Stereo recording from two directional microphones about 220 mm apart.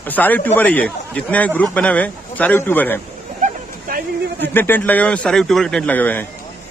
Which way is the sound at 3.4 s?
40° right (ahead or behind).